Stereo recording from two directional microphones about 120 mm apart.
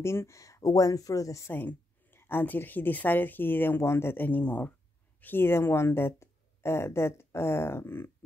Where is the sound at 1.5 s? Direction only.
15° left (ahead or behind).